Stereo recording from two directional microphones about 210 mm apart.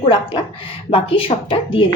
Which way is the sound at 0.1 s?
20° left (ahead or behind).